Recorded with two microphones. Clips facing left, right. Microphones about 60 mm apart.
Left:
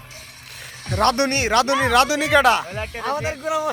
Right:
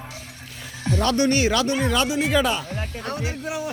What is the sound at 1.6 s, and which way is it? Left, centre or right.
Speech, left.